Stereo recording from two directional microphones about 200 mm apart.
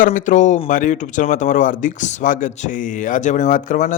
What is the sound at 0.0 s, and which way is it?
A man's voice, 40° left (ahead or behind).